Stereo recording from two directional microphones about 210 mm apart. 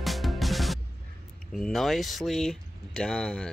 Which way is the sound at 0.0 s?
Centre (ahead or behind).